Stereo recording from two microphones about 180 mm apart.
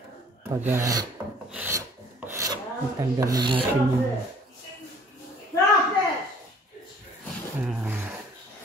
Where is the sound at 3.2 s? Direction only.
20° right (ahead or behind).